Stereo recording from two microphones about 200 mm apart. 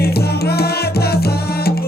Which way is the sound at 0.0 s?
50° left (ahead or behind).